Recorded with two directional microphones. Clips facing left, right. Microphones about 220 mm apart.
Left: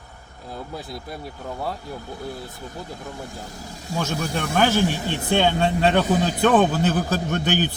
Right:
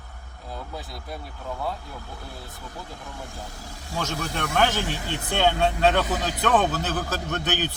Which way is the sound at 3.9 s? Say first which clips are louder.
Left 4 dB; 15° left (ahead or behind).